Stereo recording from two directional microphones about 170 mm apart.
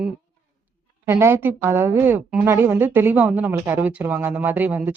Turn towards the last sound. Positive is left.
turn(degrees=-10)  # may be behind; listen again after turning